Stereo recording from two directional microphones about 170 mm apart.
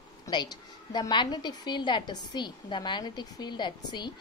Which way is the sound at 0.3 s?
25° left (ahead or behind).